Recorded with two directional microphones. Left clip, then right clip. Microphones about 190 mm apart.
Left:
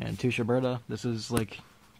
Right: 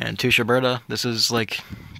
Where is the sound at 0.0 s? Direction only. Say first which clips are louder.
Right 11 dB; 10° right (ahead or behind).